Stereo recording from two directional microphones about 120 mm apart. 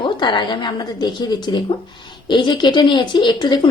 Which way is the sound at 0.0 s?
40° left (ahead or behind).